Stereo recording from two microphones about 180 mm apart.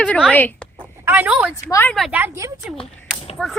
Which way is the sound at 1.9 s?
Centre (ahead or behind).